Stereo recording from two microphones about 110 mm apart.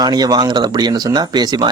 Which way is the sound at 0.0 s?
40° right (ahead or behind).